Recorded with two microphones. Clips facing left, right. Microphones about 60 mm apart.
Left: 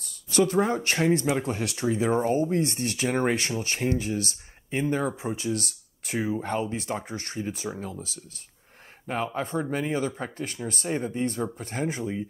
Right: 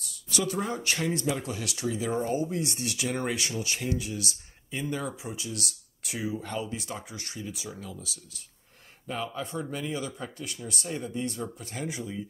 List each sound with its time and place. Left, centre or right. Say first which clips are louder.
0.0 s speech: left 7 dB; left